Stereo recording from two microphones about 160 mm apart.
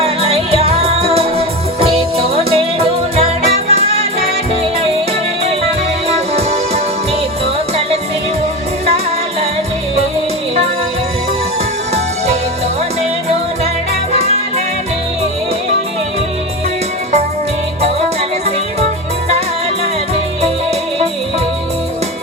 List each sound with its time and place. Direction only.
0.0 s music: 40° right (ahead or behind)
6.1 s music: 40° right (ahead or behind)